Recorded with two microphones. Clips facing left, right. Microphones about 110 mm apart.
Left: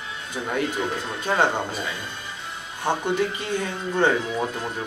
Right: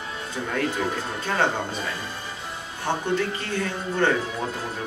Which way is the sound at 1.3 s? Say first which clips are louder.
Left 2 dB; 5° left (ahead or behind).